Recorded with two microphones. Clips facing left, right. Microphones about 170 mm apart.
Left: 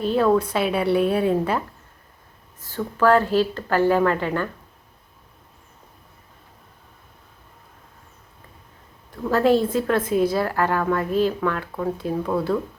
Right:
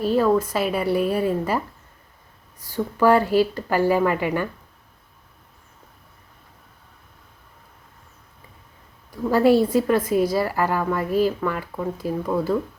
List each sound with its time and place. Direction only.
0.0 s a woman's voice: 5° right (ahead or behind)
9.3 s speech: 10° right (ahead or behind)